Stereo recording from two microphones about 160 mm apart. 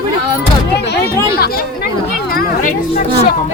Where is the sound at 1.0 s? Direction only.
75° left (ahead or behind).